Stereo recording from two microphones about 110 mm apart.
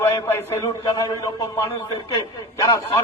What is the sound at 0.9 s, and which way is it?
A man's voice, 35° left (ahead or behind).